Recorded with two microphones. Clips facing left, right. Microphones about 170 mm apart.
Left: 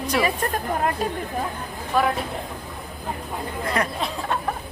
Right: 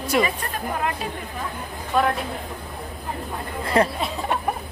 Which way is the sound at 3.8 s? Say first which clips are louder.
Right 7 dB; 30° right (ahead or behind).